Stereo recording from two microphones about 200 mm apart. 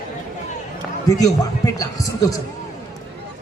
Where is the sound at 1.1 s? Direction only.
15° left (ahead or behind).